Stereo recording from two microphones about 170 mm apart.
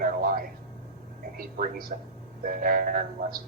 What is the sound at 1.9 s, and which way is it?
Speech, 55° right (ahead or behind).